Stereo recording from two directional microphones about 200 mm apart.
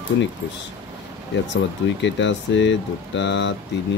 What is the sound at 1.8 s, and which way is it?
Speech, 65° left (ahead or behind).